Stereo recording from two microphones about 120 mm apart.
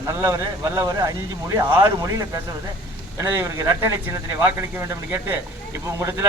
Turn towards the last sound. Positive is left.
turn(degrees=-25)  # may be behind; listen again after turning